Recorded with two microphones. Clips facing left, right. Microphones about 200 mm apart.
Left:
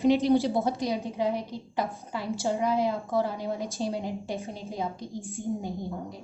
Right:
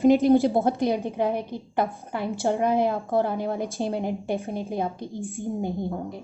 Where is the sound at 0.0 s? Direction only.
50° right (ahead or behind).